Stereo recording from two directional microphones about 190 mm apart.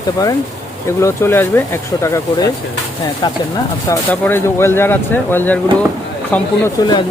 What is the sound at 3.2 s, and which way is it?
Speech, 25° left (ahead or behind).